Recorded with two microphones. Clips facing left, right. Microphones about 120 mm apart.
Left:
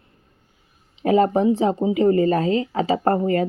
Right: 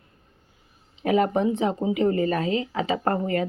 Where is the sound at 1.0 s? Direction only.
30° left (ahead or behind).